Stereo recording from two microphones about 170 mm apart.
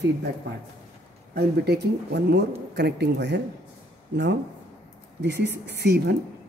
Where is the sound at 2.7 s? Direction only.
80° right.